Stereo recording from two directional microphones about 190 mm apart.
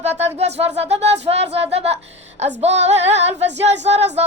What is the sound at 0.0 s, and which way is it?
A woman's voice, 35° right (ahead or behind).